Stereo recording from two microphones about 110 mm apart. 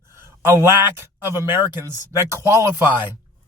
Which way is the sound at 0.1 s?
25° right (ahead or behind).